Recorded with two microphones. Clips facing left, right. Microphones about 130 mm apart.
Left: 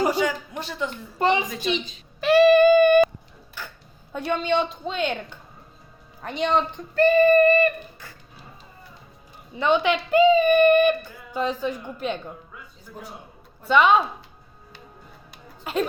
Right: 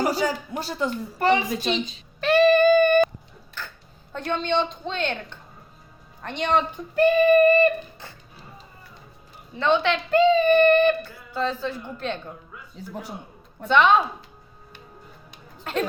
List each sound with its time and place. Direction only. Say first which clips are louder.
0.1 s speech: left 1 dB; 35° right (ahead or behind)
1.2 s a woman's voice: right 1 dB; 20° left (ahead or behind)
2.2 s a woman's voice: left 2 dB; 10° left (ahead or behind)
3.6 s a sound: even; 10° left (ahead or behind)
4.1 s a woman's voice: left 1 dB; 10° left (ahead or behind)
6.9 s a sound: left 1 dB; 15° right (ahead or behind)
9.6 s a woman's voice: left 1 dB; 10° left (ahead or behind)
12.9 s a man's voice: right 4 dB; 85° right
13.7 s speech: even; 5° left (ahead or behind)
15.7 s a woman's voice: left 1 dB; 10° left (ahead or behind)